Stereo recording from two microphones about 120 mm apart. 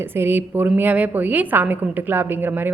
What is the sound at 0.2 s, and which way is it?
A woman's voice, 15° right (ahead or behind).